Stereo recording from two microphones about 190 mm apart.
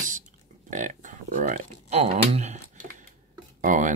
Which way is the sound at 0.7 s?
40° right (ahead or behind).